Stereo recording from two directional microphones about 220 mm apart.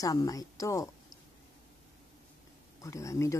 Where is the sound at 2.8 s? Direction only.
15° left (ahead or behind).